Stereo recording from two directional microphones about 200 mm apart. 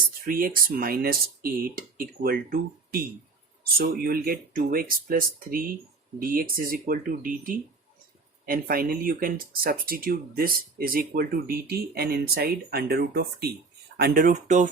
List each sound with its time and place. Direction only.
0.3 s speech: 45° right (ahead or behind)